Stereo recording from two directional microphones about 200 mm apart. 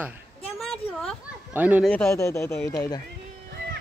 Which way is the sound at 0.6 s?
Centre (ahead or behind).